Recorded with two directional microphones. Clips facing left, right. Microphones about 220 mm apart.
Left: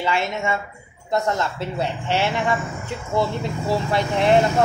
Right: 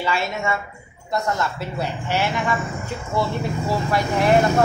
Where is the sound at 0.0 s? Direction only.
20° left (ahead or behind).